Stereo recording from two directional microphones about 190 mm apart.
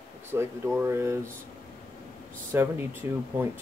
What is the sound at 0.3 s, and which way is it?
Speech, 15° right (ahead or behind).